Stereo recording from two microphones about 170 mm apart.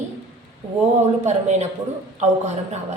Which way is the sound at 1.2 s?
40° right (ahead or behind).